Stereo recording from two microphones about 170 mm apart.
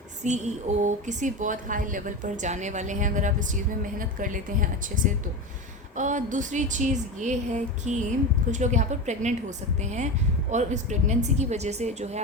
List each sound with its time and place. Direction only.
0.2 s speech: 45° right (ahead or behind)